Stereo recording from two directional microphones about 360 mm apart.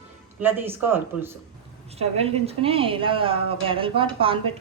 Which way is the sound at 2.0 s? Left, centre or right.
Centre.